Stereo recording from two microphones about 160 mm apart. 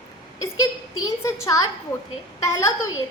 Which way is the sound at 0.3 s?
20° left (ahead or behind).